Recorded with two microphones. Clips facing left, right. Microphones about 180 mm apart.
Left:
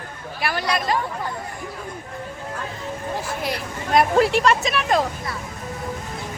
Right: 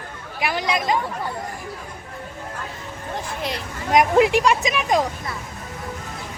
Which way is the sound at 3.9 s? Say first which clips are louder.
Right 1 dB; 15° right (ahead or behind).